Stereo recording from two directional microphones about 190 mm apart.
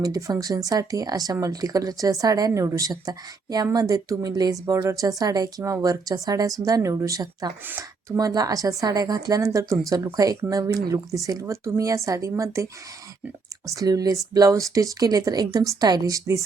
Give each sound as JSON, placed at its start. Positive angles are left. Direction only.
{"t": 0.0, "sound": "a woman's voice", "side_deg": -20}
{"t": 13.7, "sound": "a woman's voice", "side_deg": -20}